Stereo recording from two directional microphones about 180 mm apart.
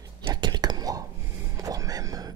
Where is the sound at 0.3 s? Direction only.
25° right (ahead or behind).